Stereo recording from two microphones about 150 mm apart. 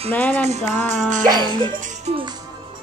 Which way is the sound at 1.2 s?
30° right (ahead or behind).